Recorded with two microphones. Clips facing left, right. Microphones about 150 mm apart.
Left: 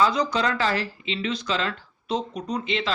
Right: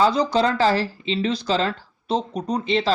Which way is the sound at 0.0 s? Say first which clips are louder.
Right 4 dB; 30° right (ahead or behind).